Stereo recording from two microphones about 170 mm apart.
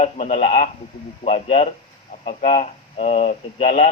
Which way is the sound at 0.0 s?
40° left (ahead or behind).